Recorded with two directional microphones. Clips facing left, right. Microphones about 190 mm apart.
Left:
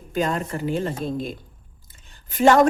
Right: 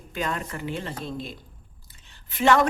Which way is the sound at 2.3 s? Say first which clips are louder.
Left 5 dB; 45° left (ahead or behind).